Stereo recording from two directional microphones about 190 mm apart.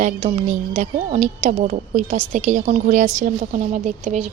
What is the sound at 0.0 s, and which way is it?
A woman's voice, 30° right (ahead or behind).